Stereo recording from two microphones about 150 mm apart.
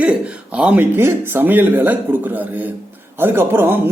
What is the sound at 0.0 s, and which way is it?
A man's voice, 5° right (ahead or behind).